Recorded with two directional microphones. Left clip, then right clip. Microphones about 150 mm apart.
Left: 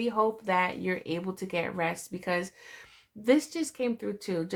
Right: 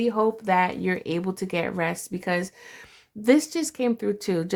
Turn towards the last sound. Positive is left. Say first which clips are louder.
# right 7 dB
turn(degrees=-45)  # may be behind; listen again after turning